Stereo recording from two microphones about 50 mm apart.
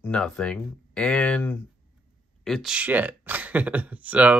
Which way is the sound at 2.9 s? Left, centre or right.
Right.